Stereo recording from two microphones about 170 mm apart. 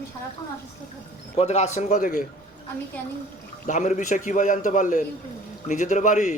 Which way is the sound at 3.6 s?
45° left (ahead or behind).